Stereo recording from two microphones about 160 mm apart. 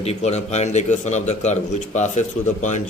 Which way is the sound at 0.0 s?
40° left (ahead or behind).